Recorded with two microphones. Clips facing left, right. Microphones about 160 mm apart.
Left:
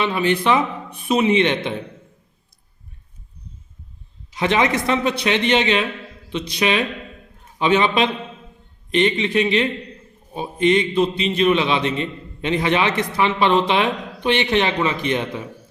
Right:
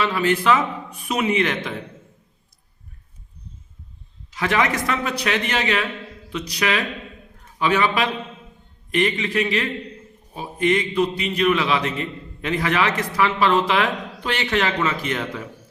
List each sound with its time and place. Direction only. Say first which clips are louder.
0.0 s a man's voice: left 1 dB; 20° left (ahead or behind)
4.4 s a man's voice: left 3 dB; 20° left (ahead or behind)